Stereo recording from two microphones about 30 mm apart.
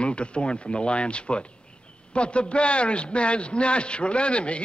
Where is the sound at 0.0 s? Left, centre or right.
Left.